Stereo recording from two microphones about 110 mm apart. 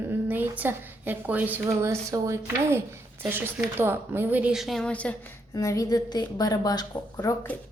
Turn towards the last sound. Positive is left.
turn(degrees=35)  # may be behind; listen again after turning